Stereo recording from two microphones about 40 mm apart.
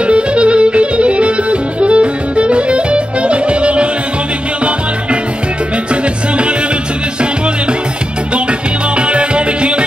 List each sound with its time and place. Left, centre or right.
0.0 s music: right
8.5 s music: right